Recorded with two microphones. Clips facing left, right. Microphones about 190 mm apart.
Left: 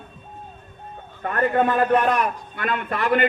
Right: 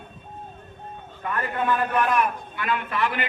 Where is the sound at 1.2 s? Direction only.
50° left (ahead or behind).